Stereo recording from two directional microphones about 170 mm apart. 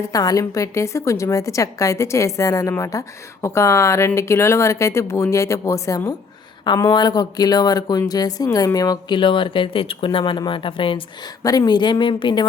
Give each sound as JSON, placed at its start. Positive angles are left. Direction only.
{"t": 0.1, "sound": "a woman's voice", "side_deg": 20}